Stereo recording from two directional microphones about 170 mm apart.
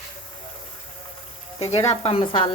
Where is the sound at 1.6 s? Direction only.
40° left (ahead or behind).